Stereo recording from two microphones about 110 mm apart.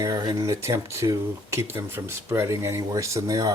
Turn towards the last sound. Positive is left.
turn(degrees=-30)  # may be behind; listen again after turning